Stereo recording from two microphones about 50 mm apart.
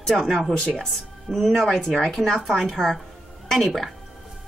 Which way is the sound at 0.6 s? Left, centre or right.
Centre.